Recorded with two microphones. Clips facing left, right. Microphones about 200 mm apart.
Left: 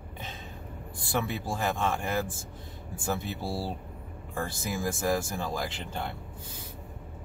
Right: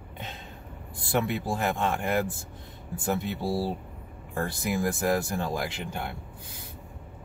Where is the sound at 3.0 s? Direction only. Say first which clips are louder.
Right 4 dB; 20° right (ahead or behind).